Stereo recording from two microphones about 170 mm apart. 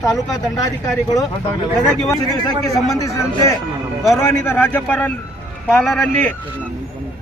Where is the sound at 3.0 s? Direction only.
20° left (ahead or behind).